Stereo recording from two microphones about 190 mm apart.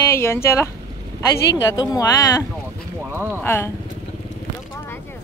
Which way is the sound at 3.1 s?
10° right (ahead or behind).